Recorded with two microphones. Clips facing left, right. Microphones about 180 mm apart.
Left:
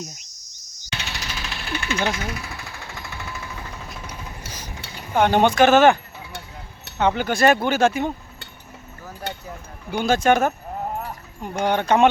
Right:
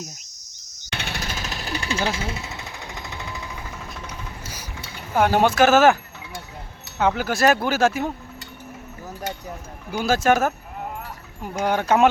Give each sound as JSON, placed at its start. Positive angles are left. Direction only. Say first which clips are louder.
{"t": 0.9, "sound": "jackhammer", "louder": "right 2 dB", "side_deg": -55}
{"t": 4.4, "sound": "a sound", "louder": "left 1 dB", "side_deg": -10}
{"t": 5.1, "sound": "speech", "louder": "left 1 dB", "side_deg": -5}
{"t": 7.0, "sound": "speech", "louder": "left 1 dB", "side_deg": -5}
{"t": 10.0, "sound": "speech", "louder": "left 1 dB", "side_deg": -5}
{"t": 11.6, "sound": "speech", "louder": "left 1 dB", "side_deg": -5}